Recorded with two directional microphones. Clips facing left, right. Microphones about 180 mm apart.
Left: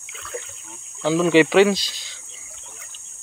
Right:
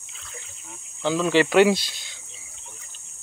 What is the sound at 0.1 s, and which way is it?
Water, 65° left (ahead or behind).